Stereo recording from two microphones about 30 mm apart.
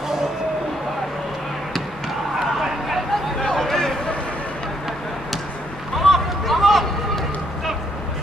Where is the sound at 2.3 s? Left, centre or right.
Centre.